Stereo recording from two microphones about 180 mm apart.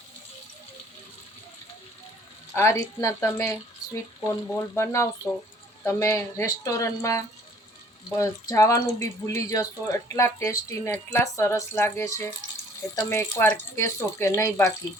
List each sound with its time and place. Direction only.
2.6 s speech: 15° left (ahead or behind)